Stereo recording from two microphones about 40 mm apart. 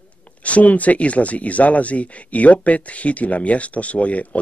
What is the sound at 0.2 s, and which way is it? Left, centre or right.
Speech, left.